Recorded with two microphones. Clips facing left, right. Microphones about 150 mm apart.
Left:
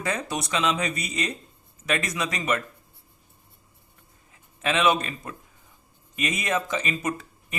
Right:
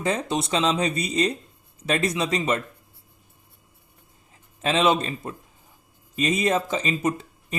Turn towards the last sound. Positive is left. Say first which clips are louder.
# right 3 dB
turn(degrees=-25)  # may be behind; listen again after turning